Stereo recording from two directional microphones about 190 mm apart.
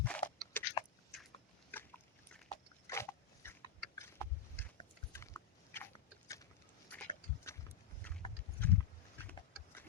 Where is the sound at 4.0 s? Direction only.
10° left (ahead or behind).